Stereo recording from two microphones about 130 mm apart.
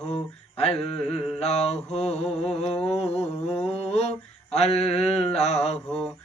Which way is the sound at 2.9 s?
55° left (ahead or behind).